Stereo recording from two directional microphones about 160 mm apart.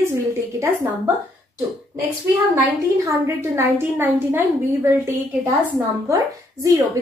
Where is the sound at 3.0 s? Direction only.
15° right (ahead or behind).